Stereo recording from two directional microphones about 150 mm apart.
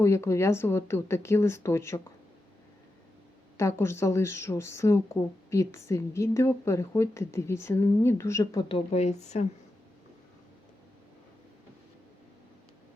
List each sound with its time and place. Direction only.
0.0 s speech: 20° left (ahead or behind)
3.6 s speech: 20° left (ahead or behind)
8.7 s speech: 45° left (ahead or behind)